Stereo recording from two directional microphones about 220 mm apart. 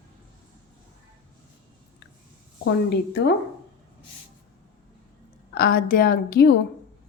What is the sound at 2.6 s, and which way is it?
Speech, 50° left (ahead or behind).